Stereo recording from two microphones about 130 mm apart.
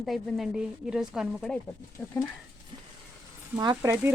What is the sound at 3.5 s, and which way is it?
Speech, 30° right (ahead or behind).